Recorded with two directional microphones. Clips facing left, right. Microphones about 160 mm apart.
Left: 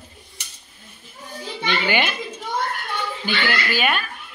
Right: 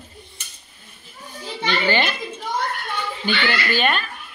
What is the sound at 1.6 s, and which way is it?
Speech, 15° left (ahead or behind).